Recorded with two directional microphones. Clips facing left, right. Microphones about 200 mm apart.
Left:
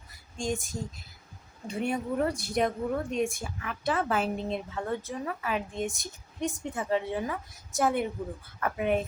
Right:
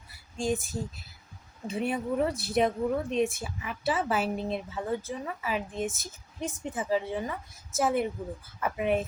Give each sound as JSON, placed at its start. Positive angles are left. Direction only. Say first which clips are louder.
{"t": 0.3, "sound": "speech", "louder": "right 2 dB", "side_deg": -5}